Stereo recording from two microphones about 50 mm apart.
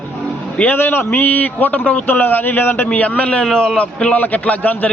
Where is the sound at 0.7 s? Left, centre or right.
Left.